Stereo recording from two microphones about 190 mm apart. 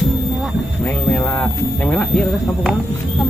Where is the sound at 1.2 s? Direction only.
10° left (ahead or behind).